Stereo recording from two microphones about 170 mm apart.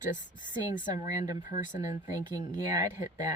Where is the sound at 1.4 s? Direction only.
50° left (ahead or behind).